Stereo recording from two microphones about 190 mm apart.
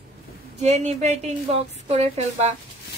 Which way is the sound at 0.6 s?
35° right (ahead or behind).